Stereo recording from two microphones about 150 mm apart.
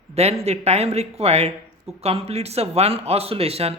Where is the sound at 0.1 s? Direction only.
45° right (ahead or behind).